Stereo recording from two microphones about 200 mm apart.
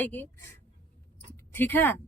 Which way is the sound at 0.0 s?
10° left (ahead or behind).